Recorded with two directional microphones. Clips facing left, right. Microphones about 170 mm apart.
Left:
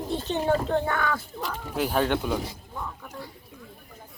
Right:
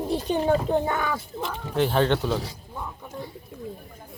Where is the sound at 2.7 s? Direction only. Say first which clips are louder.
Right 2 dB; 15° right (ahead or behind).